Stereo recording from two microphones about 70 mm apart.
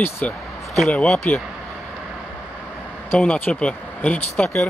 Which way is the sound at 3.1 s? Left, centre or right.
Centre.